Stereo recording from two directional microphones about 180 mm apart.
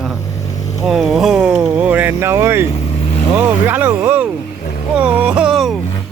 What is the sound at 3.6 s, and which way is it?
Speech, 10° right (ahead or behind).